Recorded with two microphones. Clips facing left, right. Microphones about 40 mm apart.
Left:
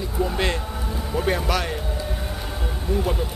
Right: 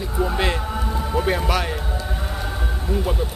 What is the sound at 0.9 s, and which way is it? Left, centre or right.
Music, centre.